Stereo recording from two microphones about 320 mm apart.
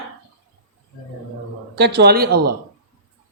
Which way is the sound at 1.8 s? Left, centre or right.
Right.